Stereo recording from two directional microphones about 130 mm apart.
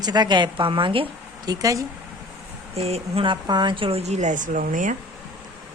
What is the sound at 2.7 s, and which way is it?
Speech, 50° right (ahead or behind).